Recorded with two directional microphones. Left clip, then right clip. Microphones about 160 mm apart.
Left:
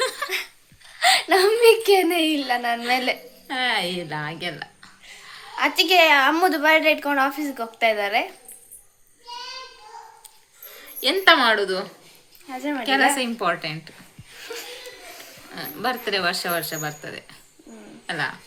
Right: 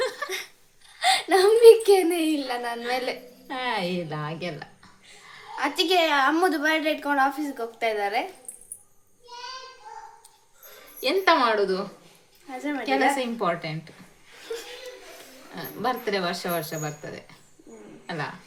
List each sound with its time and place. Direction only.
0.0 s laughter: 20° right (ahead or behind)
0.9 s a sound: 15° left (ahead or behind)
3.4 s speech: 15° right (ahead or behind)
5.5 s a woman's voice: 10° left (ahead or behind)
11.0 s speech: 15° right (ahead or behind)
14.5 s laughter: 15° left (ahead or behind)
15.5 s a woman's voice: 20° right (ahead or behind)